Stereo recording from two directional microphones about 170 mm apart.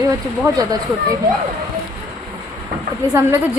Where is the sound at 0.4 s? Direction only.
20° right (ahead or behind).